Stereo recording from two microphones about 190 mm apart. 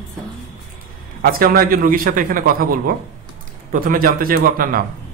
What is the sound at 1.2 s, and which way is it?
A man's voice, 50° right (ahead or behind).